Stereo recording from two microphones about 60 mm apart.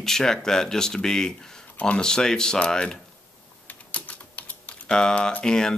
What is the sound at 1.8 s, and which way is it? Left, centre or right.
Speech, left.